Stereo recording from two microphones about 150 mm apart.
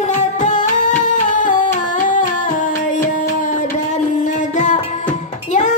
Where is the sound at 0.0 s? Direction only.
55° left (ahead or behind).